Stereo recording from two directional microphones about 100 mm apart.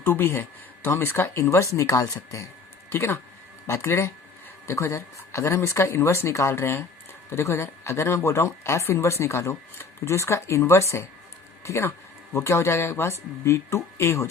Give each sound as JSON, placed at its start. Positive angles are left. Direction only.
{"t": 0.0, "sound": "speech", "side_deg": 25}